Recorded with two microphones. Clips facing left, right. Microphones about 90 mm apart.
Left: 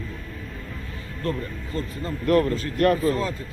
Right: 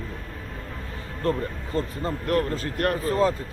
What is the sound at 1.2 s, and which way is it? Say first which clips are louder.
Speech: right 3 dB; 30° right (ahead or behind).